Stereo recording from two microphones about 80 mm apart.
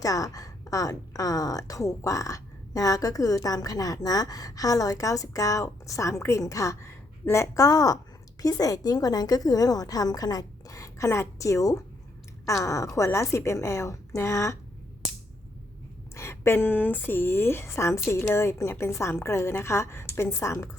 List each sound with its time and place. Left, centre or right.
0.0 s a woman's voice: left
16.1 s a woman's voice: left